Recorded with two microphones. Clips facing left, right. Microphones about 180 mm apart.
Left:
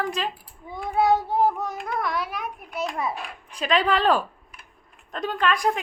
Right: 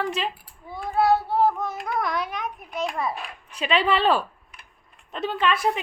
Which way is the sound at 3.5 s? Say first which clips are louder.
Even; 10° right (ahead or behind).